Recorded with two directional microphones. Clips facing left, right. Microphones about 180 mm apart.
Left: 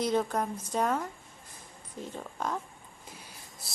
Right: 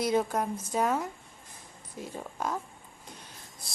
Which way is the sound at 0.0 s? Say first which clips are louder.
Right 1 dB; 10° right (ahead or behind).